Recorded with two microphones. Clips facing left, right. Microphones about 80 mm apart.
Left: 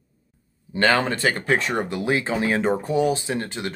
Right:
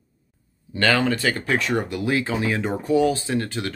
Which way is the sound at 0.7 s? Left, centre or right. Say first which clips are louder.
Even; left.